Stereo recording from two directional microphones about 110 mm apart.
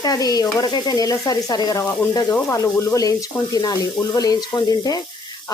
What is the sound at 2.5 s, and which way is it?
Speech, 25° left (ahead or behind).